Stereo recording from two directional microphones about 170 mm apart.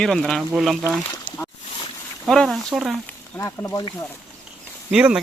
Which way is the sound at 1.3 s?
50° left (ahead or behind).